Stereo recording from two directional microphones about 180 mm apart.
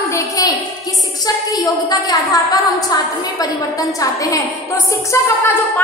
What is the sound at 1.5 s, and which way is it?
A woman's voice, 20° left (ahead or behind).